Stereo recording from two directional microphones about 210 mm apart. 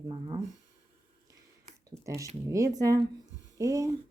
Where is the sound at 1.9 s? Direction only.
15° right (ahead or behind).